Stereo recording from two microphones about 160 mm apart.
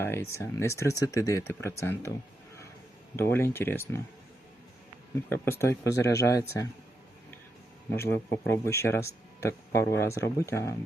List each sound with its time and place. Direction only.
0.0 s speech: 15° left (ahead or behind)
3.2 s speech: 15° left (ahead or behind)
5.3 s speech: 15° left (ahead or behind)
7.9 s speech: 15° left (ahead or behind)